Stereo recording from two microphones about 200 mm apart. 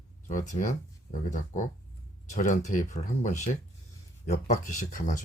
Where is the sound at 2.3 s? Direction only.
35° left (ahead or behind).